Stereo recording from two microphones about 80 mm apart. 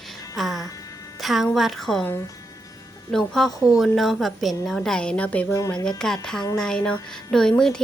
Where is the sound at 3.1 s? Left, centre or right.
Centre.